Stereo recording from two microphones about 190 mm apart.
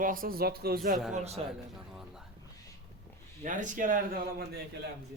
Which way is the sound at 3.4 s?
40° right (ahead or behind).